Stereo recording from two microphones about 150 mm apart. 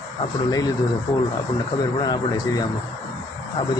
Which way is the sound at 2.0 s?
30° left (ahead or behind).